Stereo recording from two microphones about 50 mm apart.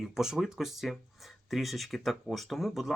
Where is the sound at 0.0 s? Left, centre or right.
Centre.